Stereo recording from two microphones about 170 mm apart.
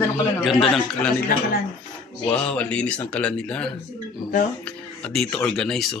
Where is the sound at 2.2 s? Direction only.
5° left (ahead or behind).